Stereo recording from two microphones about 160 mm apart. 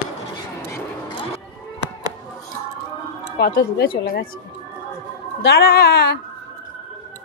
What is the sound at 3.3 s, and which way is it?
Speech, 70° left (ahead or behind).